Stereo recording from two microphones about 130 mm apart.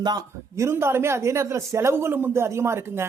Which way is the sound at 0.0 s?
30° right (ahead or behind).